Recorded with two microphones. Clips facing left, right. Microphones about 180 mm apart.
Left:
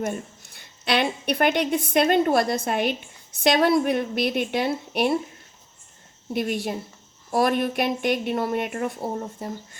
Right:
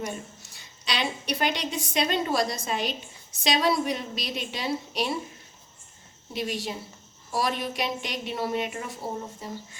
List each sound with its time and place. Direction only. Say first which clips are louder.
0.0 s a woman's voice: left 6 dB; 55° left (ahead or behind)
6.3 s a woman's voice: left 5 dB; 55° left (ahead or behind)